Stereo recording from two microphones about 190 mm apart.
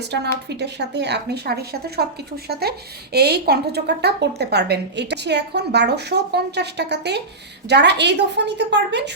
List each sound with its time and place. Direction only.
0.4 s a woman's voice: 60° right (ahead or behind)